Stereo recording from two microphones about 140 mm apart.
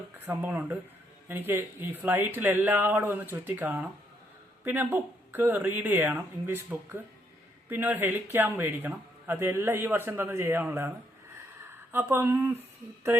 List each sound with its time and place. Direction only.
0.3 s a man's voice: 15° right (ahead or behind)